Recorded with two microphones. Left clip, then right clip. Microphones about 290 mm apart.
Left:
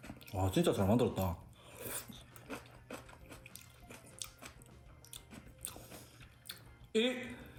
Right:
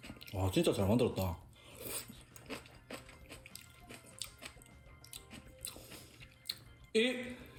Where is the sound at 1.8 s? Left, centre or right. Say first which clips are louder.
Even; centre.